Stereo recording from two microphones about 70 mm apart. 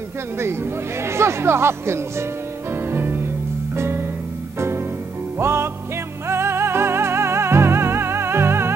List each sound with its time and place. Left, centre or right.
1.0 s speech: right
2.7 s music: right